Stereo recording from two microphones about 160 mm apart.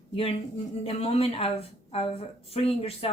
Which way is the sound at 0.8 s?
40° left (ahead or behind).